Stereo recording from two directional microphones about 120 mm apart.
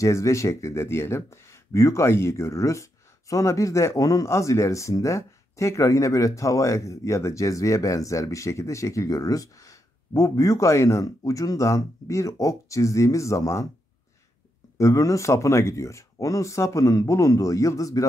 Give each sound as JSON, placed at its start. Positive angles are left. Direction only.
{"t": 0.0, "sound": "speech", "side_deg": 25}
{"t": 14.8, "sound": "speech", "side_deg": 25}